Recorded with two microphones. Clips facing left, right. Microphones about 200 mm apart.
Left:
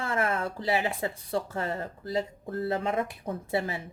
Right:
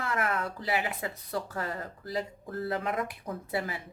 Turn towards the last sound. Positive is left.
turn(degrees=25)  # may be behind; listen again after turning